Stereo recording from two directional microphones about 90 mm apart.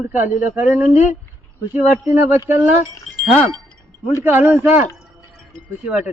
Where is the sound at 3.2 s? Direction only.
5° left (ahead or behind).